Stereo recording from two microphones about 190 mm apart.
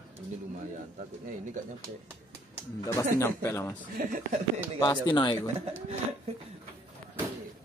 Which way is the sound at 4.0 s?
45° right (ahead or behind).